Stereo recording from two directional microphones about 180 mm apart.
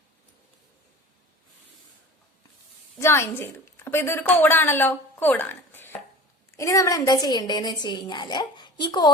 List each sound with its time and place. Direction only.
3.0 s a woman's voice: 15° left (ahead or behind)